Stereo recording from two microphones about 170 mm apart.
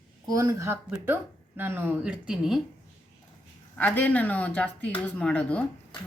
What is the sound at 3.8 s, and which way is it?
Speech, 10° left (ahead or behind).